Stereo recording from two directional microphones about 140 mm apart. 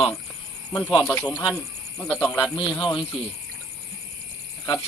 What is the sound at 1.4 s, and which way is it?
Speech, centre (ahead or behind).